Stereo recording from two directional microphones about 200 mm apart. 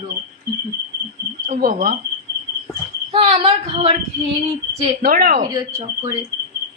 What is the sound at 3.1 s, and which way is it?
Speech, 25° right (ahead or behind).